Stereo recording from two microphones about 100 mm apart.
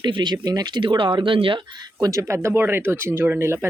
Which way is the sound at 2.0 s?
35° right (ahead or behind).